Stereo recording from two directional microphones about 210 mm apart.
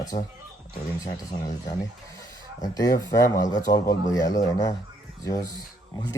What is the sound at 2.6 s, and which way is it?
Speech, 20° left (ahead or behind).